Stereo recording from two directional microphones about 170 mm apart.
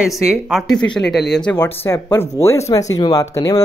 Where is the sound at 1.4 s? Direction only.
10° left (ahead or behind).